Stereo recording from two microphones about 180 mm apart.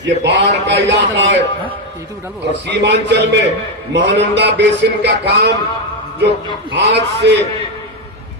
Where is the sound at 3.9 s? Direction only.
75° right (ahead or behind).